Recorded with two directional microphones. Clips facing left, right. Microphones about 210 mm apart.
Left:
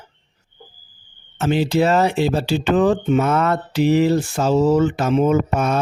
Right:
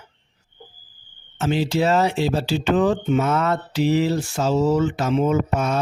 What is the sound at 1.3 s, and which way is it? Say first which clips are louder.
Speech: left 3 dB; 60° left (ahead or behind).